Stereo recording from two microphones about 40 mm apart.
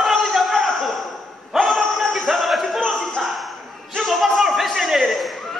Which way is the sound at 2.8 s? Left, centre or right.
Centre.